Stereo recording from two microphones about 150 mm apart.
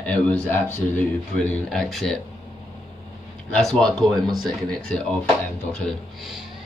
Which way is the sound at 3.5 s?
5° left (ahead or behind).